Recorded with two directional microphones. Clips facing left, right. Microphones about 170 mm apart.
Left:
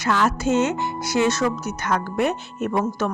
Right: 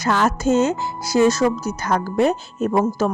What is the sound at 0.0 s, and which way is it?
A woman's voice, 40° right (ahead or behind).